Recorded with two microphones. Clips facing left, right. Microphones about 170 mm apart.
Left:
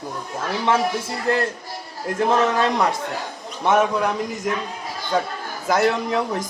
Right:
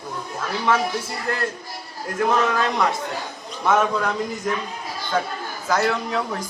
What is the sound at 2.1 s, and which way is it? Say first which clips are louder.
Speech: left 2 dB; 30° left (ahead or behind).